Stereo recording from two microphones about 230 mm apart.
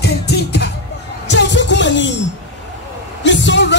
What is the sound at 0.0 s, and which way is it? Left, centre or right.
Music, left.